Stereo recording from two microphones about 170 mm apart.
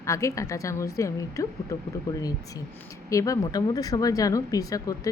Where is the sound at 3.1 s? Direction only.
20° left (ahead or behind).